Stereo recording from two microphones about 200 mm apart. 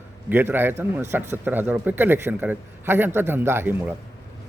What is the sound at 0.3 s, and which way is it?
A man's voice, 10° right (ahead or behind).